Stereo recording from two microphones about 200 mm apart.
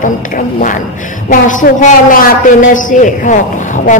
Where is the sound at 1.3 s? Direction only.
40° left (ahead or behind).